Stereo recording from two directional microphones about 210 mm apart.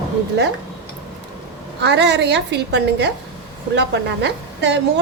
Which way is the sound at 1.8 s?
55° right (ahead or behind).